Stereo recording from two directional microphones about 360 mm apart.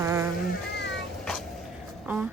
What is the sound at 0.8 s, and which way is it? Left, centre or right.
Cat, left.